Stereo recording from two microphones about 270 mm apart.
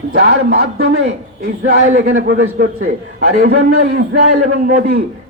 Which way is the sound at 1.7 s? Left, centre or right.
Right.